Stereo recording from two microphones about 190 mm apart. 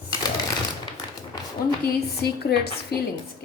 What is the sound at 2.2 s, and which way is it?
Speech, 60° left (ahead or behind).